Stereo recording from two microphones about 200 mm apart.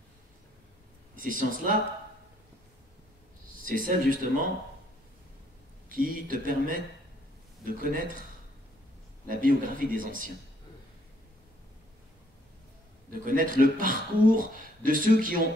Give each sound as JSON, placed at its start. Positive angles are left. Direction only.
{"t": 1.1, "sound": "speech", "side_deg": -45}
{"t": 3.6, "sound": "speech", "side_deg": -45}
{"t": 5.9, "sound": "speech", "side_deg": -45}
{"t": 9.3, "sound": "speech", "side_deg": -45}
{"t": 13.2, "sound": "speech", "side_deg": -45}